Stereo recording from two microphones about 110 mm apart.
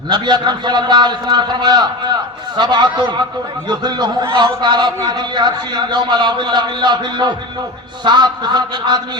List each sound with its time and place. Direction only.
0.1 s a man's voice: 40° right (ahead or behind)